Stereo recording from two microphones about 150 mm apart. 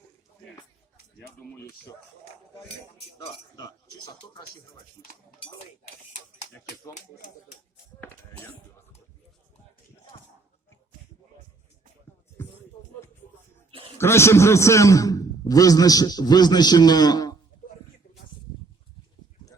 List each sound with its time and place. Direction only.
3.5 s a man's voice: 25° left (ahead or behind)
14.0 s a man's voice: 20° left (ahead or behind)